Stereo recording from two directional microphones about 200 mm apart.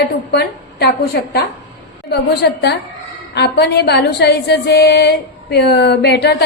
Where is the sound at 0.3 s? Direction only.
55° left (ahead or behind).